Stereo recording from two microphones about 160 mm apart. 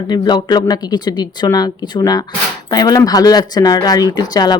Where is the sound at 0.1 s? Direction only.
25° left (ahead or behind).